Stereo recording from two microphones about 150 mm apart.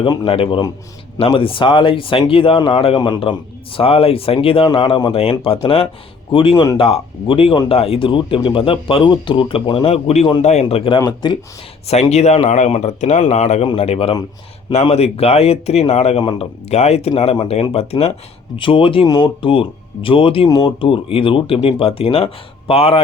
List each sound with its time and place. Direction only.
0.0 s speech: 35° left (ahead or behind)
11.9 s speech: 45° left (ahead or behind)